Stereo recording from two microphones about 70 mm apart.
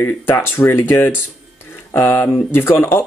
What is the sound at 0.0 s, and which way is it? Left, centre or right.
Speech, left.